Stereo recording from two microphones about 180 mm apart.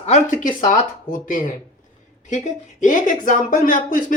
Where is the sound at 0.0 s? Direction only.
40° left (ahead or behind).